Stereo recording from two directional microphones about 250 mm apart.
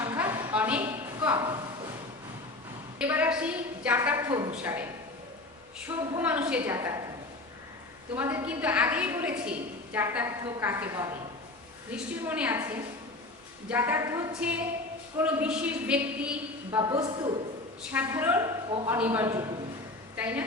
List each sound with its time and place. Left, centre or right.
0.0 s a sound: centre
3.0 s a woman's voice: centre
5.9 s a woman's voice: centre
8.1 s a woman's voice: centre
16.8 s a man's voice: centre
17.9 s a woman's voice: centre